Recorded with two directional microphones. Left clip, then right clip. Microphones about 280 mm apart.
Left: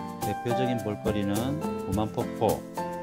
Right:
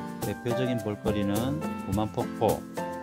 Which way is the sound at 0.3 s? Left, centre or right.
Centre.